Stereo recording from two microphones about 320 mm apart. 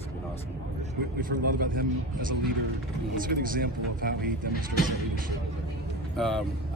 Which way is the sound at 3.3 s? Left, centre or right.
Right.